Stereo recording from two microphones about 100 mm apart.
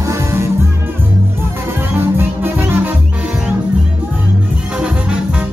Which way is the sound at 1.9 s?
20° right (ahead or behind).